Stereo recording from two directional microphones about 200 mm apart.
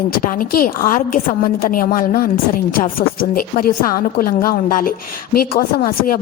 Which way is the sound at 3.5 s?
45° left (ahead or behind).